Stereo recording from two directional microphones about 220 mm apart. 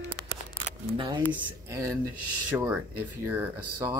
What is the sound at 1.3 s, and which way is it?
Speech, 15° right (ahead or behind).